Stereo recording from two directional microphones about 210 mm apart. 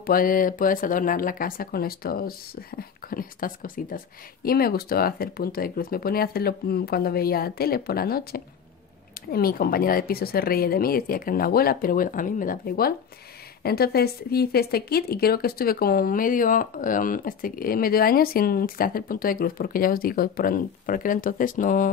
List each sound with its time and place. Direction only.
0.0 s a woman's voice: 40° left (ahead or behind)